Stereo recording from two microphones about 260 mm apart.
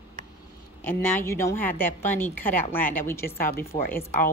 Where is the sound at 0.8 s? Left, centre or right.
Centre.